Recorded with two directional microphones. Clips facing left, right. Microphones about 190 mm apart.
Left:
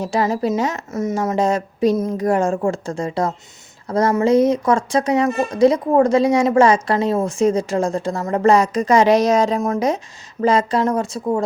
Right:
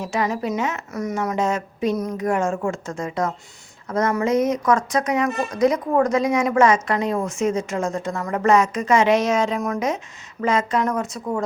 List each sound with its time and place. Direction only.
0.0 s speech: 35° left (ahead or behind)